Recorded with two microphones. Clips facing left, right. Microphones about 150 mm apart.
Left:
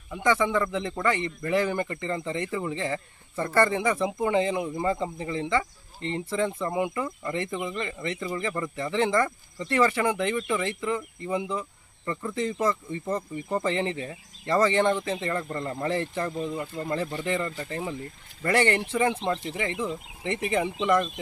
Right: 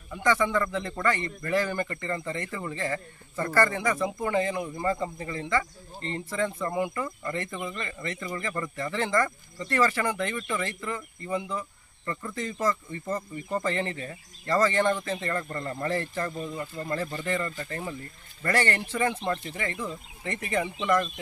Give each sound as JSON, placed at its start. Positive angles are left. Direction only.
{"t": 0.1, "sound": "speech", "side_deg": 10}